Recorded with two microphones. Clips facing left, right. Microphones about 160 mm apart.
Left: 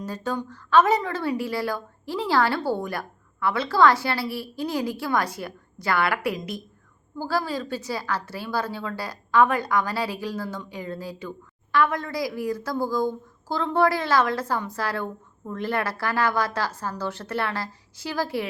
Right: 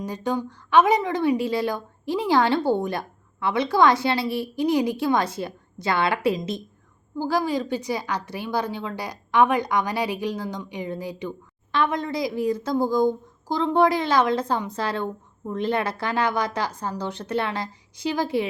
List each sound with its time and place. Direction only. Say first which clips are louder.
0.0 s a woman's voice: right 3 dB; 15° right (ahead or behind)